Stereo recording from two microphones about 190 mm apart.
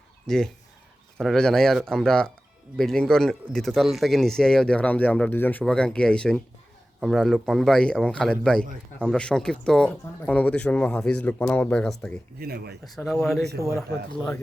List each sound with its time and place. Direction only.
0.3 s speech: 5° left (ahead or behind)
12.4 s speech: 55° right (ahead or behind)
13.2 s speech: centre (ahead or behind)